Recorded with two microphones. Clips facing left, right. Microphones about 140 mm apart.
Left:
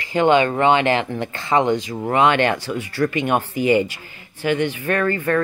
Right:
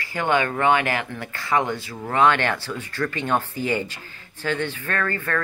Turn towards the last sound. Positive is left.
turn(degrees=15)  # may be behind; listen again after turning